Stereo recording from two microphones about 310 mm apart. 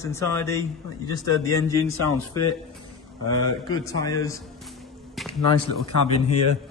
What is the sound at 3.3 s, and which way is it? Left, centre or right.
A man's voice, centre.